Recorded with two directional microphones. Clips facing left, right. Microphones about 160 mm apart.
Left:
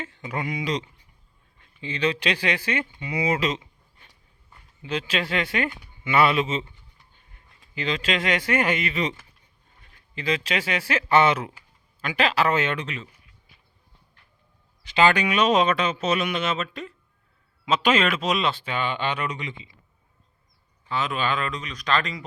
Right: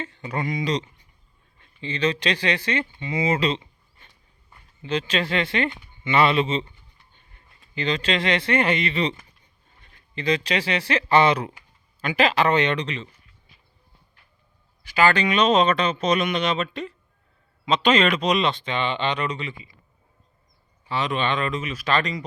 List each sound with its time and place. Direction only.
0.0 s a man's voice: 5° left (ahead or behind)
14.8 s speech: 20° left (ahead or behind)
15.1 s speech: 10° left (ahead or behind)
20.8 s speech: centre (ahead or behind)